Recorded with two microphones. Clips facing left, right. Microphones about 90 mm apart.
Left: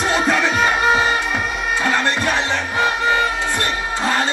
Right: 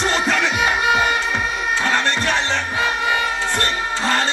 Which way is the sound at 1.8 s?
5° left (ahead or behind).